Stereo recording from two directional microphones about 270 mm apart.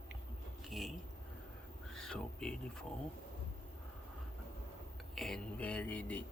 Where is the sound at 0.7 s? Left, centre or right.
Centre.